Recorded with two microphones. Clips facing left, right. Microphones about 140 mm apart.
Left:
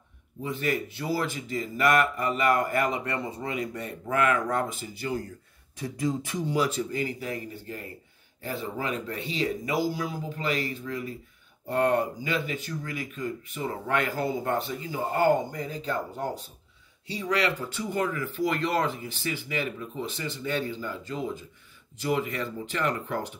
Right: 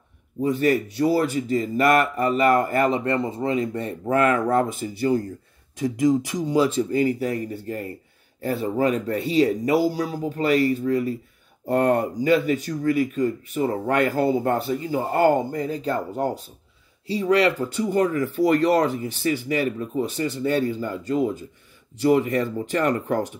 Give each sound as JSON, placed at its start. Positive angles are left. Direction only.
{"t": 0.4, "sound": "speech", "side_deg": -40}
{"t": 5.8, "sound": "speech", "side_deg": -15}
{"t": 6.5, "sound": "speech", "side_deg": -30}